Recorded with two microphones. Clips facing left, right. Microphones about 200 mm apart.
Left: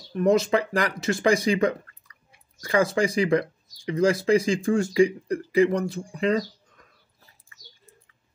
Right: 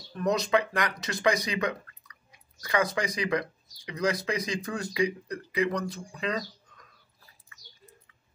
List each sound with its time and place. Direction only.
0.1 s speech: 25° left (ahead or behind)